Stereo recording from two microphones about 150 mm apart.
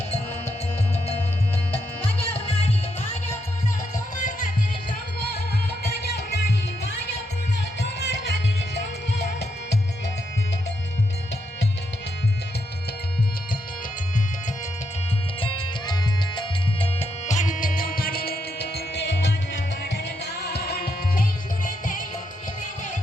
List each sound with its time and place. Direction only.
2.0 s music: 40° left (ahead or behind)
3.9 s music: 60° left (ahead or behind)
5.8 s music: 90° left
7.9 s music: 90° left
15.4 s music: 35° left (ahead or behind); by 19.2 s 90° left
20.5 s music: 90° left; by 22.0 s 60° left (ahead or behind)